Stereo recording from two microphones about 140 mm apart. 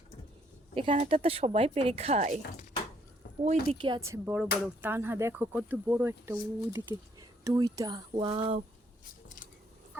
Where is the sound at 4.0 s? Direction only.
20° right (ahead or behind); by 8.6 s 35° right (ahead or behind).